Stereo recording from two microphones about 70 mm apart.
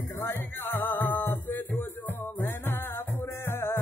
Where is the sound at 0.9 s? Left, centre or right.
Left.